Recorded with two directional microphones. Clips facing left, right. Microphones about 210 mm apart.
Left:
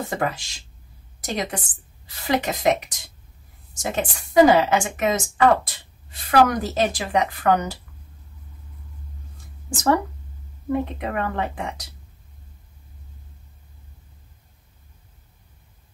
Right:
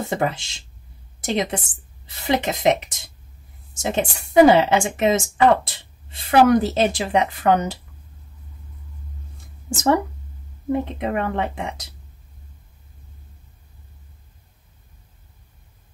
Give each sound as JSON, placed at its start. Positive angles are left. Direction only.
{"t": 0.0, "sound": "a woman's voice", "side_deg": -25}
{"t": 9.7, "sound": "speech", "side_deg": -25}